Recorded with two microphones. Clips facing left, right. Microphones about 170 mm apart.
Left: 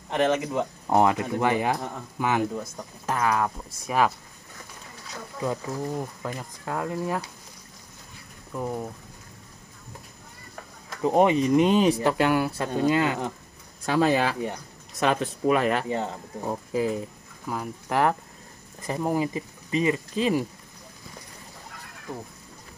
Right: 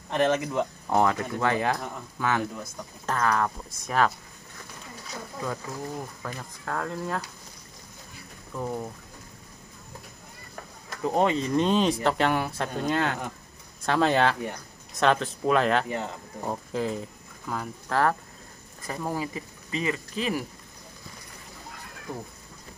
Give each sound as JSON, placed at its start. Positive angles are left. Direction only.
{"t": 0.1, "sound": "speech", "side_deg": 20}
{"t": 5.4, "sound": "speech", "side_deg": 15}
{"t": 8.5, "sound": "speech", "side_deg": 5}
{"t": 11.0, "sound": "speech", "side_deg": 15}